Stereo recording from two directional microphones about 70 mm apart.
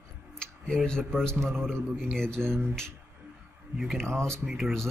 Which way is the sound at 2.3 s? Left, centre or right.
Right.